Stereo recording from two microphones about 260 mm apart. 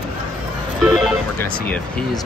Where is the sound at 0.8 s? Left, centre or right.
Centre.